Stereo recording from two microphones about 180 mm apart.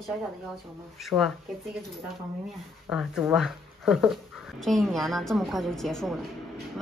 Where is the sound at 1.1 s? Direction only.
15° right (ahead or behind).